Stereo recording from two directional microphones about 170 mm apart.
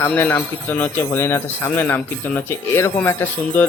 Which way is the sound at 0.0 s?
10° left (ahead or behind).